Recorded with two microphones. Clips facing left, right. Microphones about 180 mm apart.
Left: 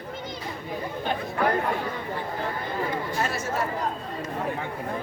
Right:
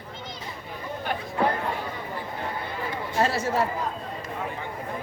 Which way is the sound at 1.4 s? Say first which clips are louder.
Even; 25° right (ahead or behind).